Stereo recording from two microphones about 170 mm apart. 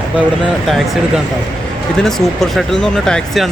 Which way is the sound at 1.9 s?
Centre (ahead or behind).